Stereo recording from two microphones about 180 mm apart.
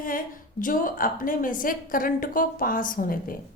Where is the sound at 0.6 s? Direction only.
50° left (ahead or behind).